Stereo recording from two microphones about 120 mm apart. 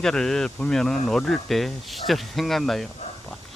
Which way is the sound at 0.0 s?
5° left (ahead or behind).